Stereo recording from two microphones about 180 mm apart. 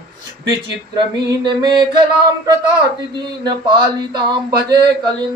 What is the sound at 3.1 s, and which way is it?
A woman's voice, 25° right (ahead or behind).